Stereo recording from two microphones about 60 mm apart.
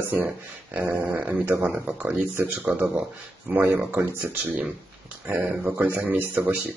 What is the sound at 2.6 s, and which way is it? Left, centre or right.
Speech, right.